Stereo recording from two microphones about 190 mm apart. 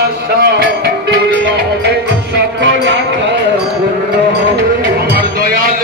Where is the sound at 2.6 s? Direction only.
70° right (ahead or behind).